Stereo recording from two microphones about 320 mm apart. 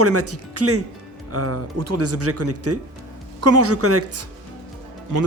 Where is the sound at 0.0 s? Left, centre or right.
Right.